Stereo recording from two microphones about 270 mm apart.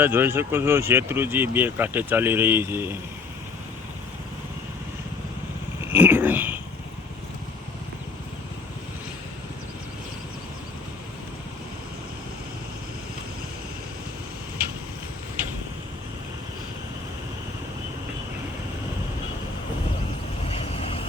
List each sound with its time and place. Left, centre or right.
0.0 s speech: centre
5.9 s a sound: centre
20.5 s vehicle: left